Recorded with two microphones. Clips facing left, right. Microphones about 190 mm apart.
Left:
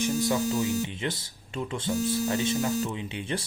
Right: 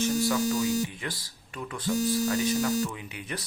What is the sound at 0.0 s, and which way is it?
Speech, 20° left (ahead or behind).